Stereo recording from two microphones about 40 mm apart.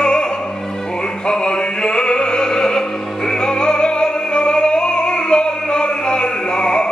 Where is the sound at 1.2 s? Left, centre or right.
Left.